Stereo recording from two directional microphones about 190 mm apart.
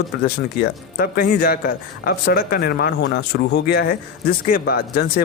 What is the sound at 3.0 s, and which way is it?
Speech, 65° left (ahead or behind).